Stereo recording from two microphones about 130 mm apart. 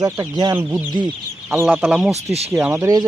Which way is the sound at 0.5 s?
15° right (ahead or behind).